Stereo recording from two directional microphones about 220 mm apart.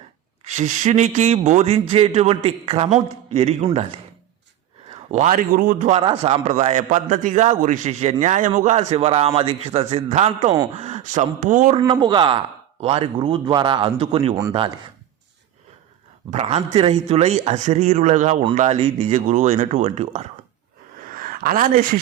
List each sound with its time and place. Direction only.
0.5 s a man's voice: 35° right (ahead or behind)
5.1 s a man's voice: 35° right (ahead or behind)
6.0 s a man's voice: 25° right (ahead or behind)
11.8 s a man's voice: 20° right (ahead or behind)
16.3 s a man's voice: 30° right (ahead or behind)
21.0 s a sound: 40° right (ahead or behind)